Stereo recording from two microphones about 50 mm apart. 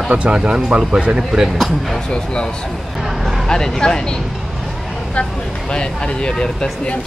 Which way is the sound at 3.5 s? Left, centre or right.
Centre.